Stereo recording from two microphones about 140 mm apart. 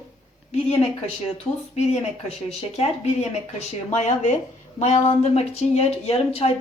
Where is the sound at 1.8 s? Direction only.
50° left (ahead or behind).